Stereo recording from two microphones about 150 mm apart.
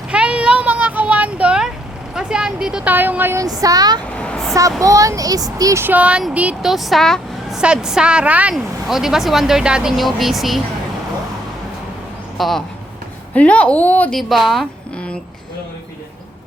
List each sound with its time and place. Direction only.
0.1 s a sound: 5° right (ahead or behind)
2.1 s speech: 5° right (ahead or behind)
3.4 s speech: 25° right (ahead or behind)
4.2 s a sound: 5° left (ahead or behind)
4.8 s a woman's voice: 20° right (ahead or behind); by 10.6 s centre (ahead or behind)
12.4 s a woman's voice: centre (ahead or behind)
14.2 s a woman's voice: centre (ahead or behind)